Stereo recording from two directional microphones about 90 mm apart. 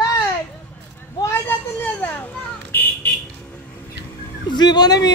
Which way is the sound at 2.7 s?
20° left (ahead or behind).